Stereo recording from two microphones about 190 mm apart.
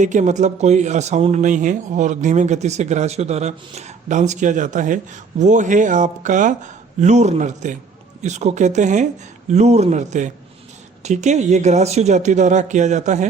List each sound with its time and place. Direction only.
0.0 s speech: 40° right (ahead or behind)